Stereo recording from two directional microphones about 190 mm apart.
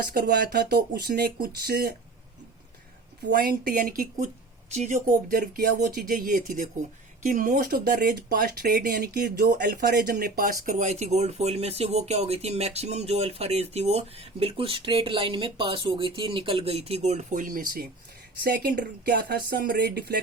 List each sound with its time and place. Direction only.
0.0 s speech: 50° right (ahead or behind)
3.2 s speech: 50° right (ahead or behind)
4.7 s speech: 35° right (ahead or behind)
5.3 s speech: 50° right (ahead or behind)